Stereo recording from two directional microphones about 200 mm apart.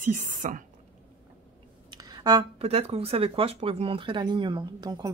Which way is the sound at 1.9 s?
20° right (ahead or behind).